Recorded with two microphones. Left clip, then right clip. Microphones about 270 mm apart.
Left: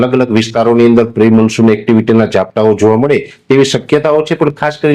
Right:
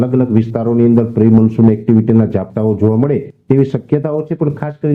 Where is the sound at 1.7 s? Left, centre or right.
Left.